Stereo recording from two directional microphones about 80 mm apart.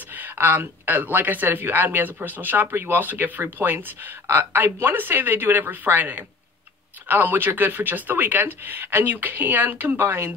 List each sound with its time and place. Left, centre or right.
0.1 s speech: right